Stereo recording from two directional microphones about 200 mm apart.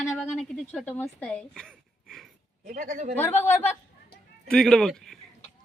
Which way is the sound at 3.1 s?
10° left (ahead or behind).